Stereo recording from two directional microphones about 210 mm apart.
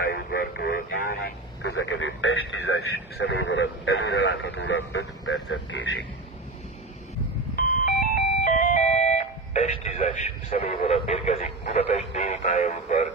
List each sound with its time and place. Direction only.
0.0 s a sound: 45° left (ahead or behind)
1.6 s speech: 60° left (ahead or behind)
3.2 s speech: 55° left (ahead or behind)
7.5 s doorbell: 40° left (ahead or behind)
10.6 s speech: 25° left (ahead or behind)